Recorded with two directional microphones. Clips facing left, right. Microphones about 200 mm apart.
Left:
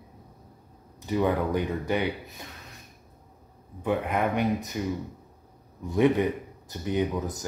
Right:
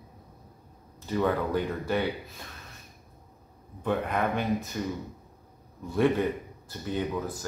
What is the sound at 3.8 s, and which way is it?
Speech, 15° left (ahead or behind).